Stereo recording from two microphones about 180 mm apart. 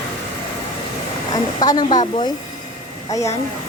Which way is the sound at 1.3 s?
20° left (ahead or behind).